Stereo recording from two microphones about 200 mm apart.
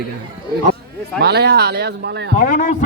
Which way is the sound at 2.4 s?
45° left (ahead or behind).